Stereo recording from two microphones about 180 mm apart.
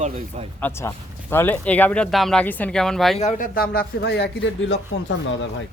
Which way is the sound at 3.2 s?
45° left (ahead or behind).